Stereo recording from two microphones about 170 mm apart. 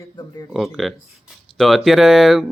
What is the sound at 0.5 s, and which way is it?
Speech, centre (ahead or behind).